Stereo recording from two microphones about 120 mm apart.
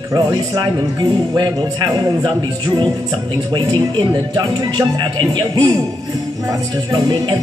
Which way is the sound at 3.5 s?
40° right (ahead or behind).